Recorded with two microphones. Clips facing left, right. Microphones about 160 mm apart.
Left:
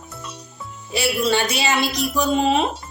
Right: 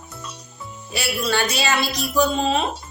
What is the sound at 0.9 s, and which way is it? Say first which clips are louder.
A woman's voice: left 4 dB; 25° left (ahead or behind).